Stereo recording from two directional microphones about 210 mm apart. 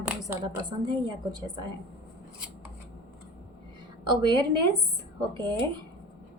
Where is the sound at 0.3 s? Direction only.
20° right (ahead or behind).